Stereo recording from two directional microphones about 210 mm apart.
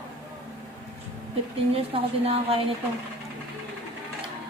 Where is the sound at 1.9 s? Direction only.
25° right (ahead or behind).